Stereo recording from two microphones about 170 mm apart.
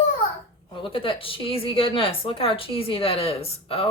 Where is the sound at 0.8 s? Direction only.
30° left (ahead or behind).